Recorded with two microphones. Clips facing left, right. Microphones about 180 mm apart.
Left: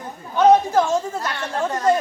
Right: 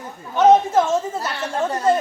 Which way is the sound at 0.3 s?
Centre (ahead or behind).